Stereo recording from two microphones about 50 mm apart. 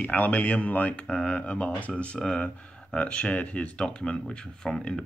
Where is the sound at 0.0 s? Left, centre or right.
Left.